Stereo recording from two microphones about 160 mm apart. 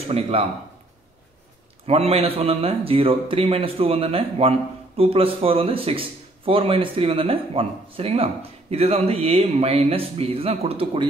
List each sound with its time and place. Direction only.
0.1 s a man's voice: 35° right (ahead or behind)
1.9 s a man's voice: 40° right (ahead or behind)